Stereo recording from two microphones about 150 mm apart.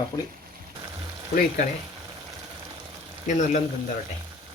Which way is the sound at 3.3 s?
50° left (ahead or behind).